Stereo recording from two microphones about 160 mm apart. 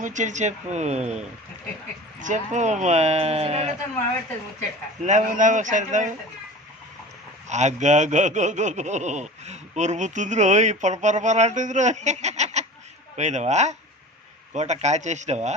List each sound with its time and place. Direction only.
0.0 s speech: 50° right (ahead or behind)
5.0 s speech: 50° right (ahead or behind)
7.4 s speech: 45° right (ahead or behind)